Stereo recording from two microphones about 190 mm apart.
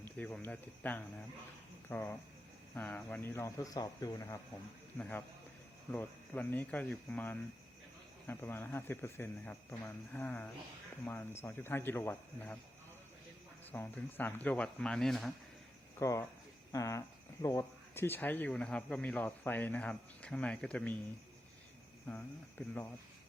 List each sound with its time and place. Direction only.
0.0 s speech: 10° left (ahead or behind)
4.9 s speech: 5° left (ahead or behind)
13.7 s speech: 10° left (ahead or behind)
16.0 s speech: 15° left (ahead or behind)
22.0 s speech: 10° left (ahead or behind)